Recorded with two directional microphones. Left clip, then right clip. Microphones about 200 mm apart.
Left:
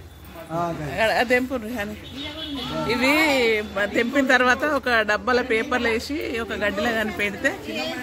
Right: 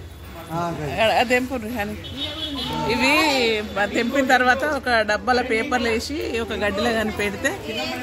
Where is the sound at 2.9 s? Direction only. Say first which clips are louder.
Right 1 dB; 40° left (ahead or behind); by 7.5 s 20° left (ahead or behind).